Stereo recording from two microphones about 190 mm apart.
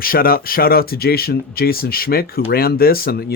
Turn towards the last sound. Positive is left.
turn(degrees=50)  # may be behind; listen again after turning